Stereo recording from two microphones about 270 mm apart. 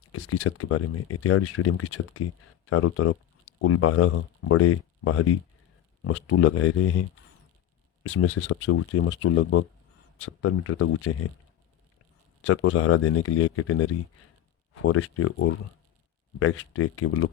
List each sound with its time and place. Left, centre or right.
0.2 s speech: left
6.1 s speech: left
8.0 s speech: left
12.5 s speech: left